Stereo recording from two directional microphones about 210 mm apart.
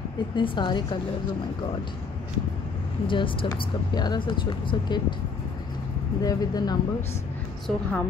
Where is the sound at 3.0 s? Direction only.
25° left (ahead or behind).